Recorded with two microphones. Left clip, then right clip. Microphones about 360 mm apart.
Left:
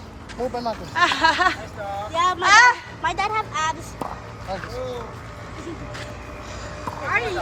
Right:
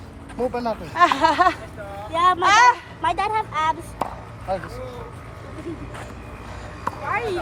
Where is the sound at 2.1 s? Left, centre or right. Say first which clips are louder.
Right 3 dB; right.